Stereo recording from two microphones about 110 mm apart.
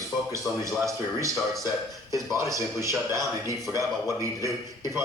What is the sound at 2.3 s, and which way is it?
A man's voice, 30° right (ahead or behind).